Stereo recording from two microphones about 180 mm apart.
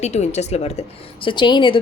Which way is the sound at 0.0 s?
40° left (ahead or behind).